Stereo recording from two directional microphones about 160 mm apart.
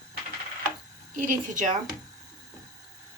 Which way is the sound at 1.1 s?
55° right (ahead or behind).